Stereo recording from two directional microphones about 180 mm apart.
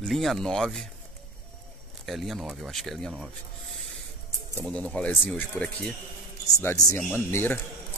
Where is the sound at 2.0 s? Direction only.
Centre (ahead or behind).